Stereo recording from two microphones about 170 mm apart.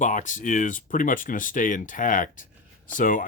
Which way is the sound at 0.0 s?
45° left (ahead or behind).